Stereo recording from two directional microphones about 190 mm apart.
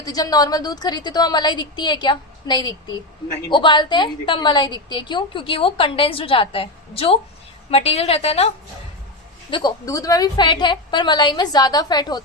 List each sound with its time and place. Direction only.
0.0 s a woman's voice: 20° left (ahead or behind)
9.5 s a woman's voice: 25° left (ahead or behind)